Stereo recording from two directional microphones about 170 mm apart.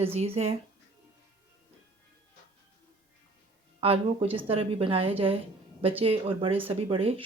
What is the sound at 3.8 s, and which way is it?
Speech, 35° right (ahead or behind).